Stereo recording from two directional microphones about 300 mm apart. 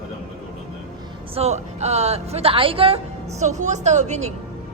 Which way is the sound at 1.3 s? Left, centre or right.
Right.